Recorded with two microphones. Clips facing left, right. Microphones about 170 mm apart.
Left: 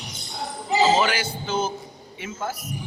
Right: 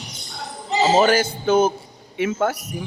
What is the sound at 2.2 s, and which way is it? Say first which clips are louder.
Speech: right 10 dB; 65° right (ahead or behind).